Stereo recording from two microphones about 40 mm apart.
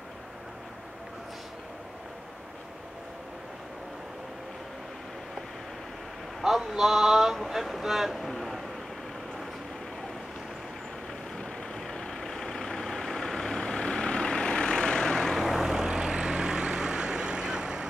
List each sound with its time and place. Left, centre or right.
6.4 s speech: centre
8.2 s a sound: centre
11.3 s vehicle: centre
15.2 s vehicle: centre
15.7 s vehicle: centre